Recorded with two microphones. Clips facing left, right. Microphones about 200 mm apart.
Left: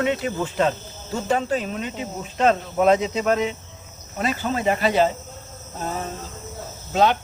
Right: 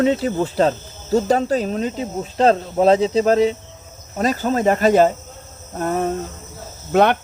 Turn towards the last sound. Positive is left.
turn(degrees=-60)  # may be behind; listen again after turning